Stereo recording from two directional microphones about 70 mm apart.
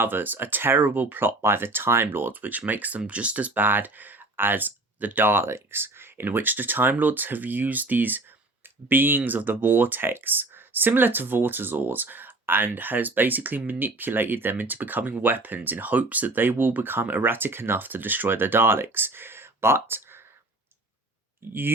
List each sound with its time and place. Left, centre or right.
0.0 s speech: right
21.4 s speech: right